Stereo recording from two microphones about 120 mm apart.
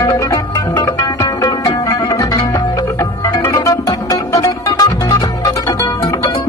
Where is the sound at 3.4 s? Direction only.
30° left (ahead or behind).